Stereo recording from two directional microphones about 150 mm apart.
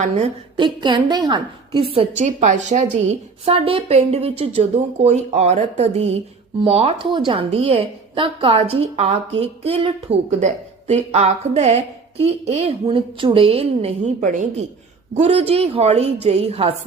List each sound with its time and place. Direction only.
0.5 s a woman's voice: 30° right (ahead or behind)
2.2 s a woman's voice: 55° right (ahead or behind)